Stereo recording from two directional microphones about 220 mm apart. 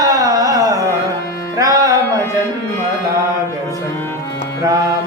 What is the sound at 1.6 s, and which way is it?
Music, 15° right (ahead or behind).